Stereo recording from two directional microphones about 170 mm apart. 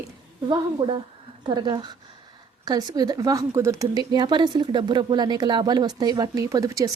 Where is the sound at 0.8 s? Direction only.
30° right (ahead or behind).